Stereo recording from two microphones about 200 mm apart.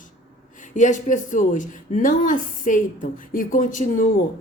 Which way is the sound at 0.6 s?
40° left (ahead or behind).